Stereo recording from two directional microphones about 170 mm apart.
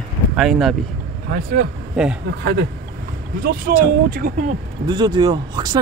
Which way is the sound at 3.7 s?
55° right (ahead or behind).